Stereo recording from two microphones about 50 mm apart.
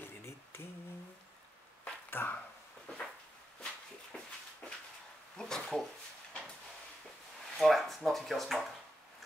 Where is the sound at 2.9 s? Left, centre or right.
Left.